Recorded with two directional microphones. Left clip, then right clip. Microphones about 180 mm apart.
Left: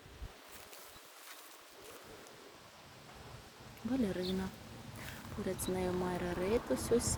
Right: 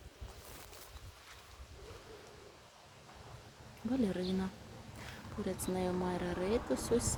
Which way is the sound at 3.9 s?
20° right (ahead or behind).